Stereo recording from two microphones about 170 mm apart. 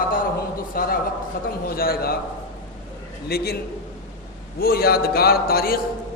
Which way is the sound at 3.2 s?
65° left (ahead or behind).